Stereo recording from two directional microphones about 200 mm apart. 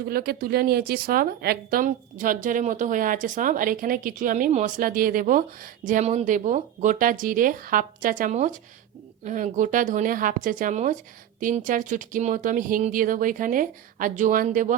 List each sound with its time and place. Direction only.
0.1 s a woman's voice: 50° right (ahead or behind)